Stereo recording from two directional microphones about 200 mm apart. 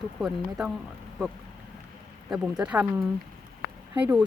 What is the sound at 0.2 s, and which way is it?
Speech, centre (ahead or behind).